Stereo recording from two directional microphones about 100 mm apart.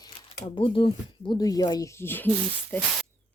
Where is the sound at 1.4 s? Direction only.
40° left (ahead or behind); by 2.9 s 20° left (ahead or behind).